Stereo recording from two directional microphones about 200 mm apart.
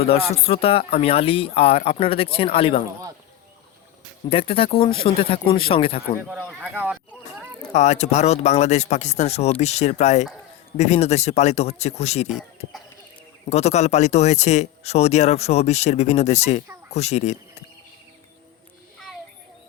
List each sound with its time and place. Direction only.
0.4 s speech: 30° left (ahead or behind)
4.3 s speech: 30° left (ahead or behind)
6.2 s speech: 5° right (ahead or behind)
7.7 s speech: 35° left (ahead or behind)
13.5 s speech: 35° left (ahead or behind)